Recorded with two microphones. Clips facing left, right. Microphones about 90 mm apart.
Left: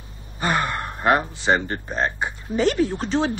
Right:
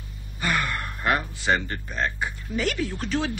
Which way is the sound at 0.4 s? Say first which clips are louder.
Left 4 dB; 30° left (ahead or behind).